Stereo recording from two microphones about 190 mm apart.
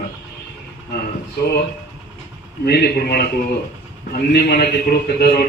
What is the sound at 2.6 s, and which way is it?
A man's voice, 55° left (ahead or behind).